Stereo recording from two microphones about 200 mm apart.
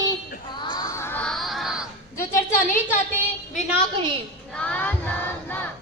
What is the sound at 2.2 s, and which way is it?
Speech, 10° left (ahead or behind).